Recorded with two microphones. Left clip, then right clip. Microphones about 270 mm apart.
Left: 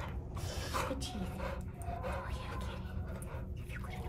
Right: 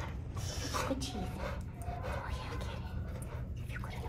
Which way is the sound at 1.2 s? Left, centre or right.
Centre.